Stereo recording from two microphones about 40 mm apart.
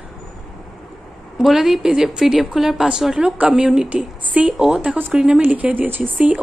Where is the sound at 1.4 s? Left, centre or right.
Centre.